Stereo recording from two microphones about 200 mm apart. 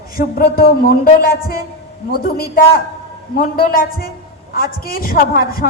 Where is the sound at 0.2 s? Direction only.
50° left (ahead or behind).